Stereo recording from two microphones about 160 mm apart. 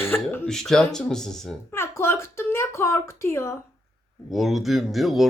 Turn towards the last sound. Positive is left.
turn(degrees=0)  # may be behind; listen again after turning